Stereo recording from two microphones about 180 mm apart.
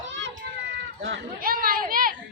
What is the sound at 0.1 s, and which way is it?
Run, 90° right.